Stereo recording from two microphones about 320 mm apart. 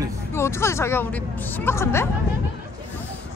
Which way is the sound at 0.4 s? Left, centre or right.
Centre.